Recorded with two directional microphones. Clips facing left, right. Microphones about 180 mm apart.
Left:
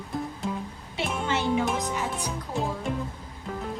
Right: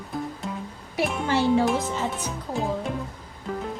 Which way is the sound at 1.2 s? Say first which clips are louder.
Right 5 dB; 20° left (ahead or behind).